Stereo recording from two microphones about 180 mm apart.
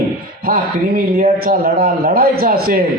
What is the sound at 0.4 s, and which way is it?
A man's voice, 55° right (ahead or behind).